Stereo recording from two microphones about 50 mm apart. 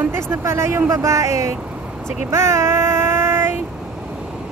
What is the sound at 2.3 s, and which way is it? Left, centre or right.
Child singing, right.